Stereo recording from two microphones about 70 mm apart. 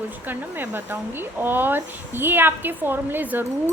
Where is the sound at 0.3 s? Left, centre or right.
Right.